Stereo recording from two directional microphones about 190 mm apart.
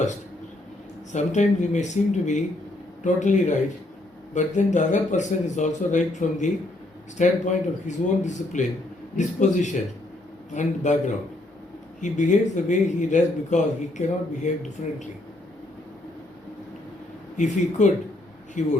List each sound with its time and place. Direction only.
1.1 s speech: 40° left (ahead or behind)
17.3 s speech: 40° left (ahead or behind)